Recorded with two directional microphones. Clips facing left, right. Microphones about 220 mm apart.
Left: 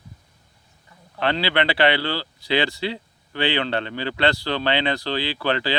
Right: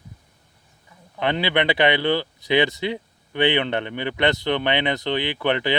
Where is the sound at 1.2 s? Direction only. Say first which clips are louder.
Right 1 dB; 20° right (ahead or behind).